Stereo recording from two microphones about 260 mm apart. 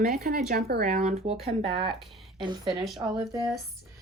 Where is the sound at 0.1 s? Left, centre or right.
Right.